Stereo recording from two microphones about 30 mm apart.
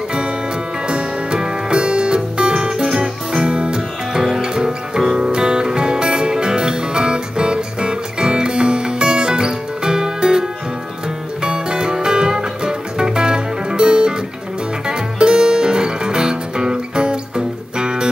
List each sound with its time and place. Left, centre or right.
0.8 s music: right
11.4 s music: right